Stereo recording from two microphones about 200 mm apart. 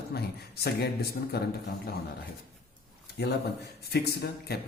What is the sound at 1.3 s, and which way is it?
Speech, 55° left (ahead or behind).